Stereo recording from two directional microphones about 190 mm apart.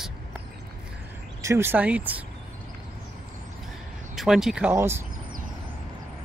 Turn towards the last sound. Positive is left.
turn(degrees=-10)  # may be behind; listen again after turning